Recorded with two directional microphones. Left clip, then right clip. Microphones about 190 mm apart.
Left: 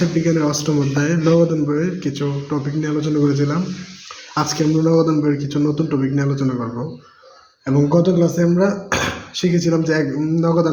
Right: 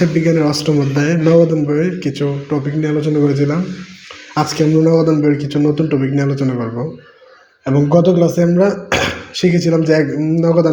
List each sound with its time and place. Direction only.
0.0 s speech: 20° right (ahead or behind)
7.6 s speech: 10° right (ahead or behind)